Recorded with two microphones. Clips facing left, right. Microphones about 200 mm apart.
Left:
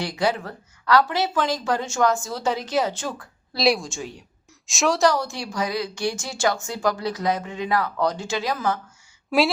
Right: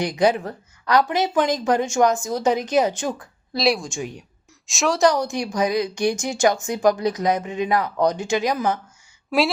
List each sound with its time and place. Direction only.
0.0 s speech: 20° right (ahead or behind)
3.6 s a woman's voice: centre (ahead or behind)
5.1 s speech: 20° right (ahead or behind)
9.3 s a woman's voice: centre (ahead or behind)